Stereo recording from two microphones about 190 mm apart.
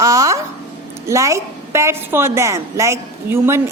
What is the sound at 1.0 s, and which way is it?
A woman's voice, 15° right (ahead or behind).